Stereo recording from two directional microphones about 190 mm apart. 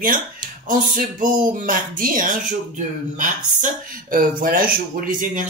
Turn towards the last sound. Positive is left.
turn(degrees=-45)  # may be behind; listen again after turning